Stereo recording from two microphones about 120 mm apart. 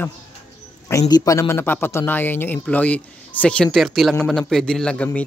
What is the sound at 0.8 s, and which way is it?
A man's voice, 30° left (ahead or behind).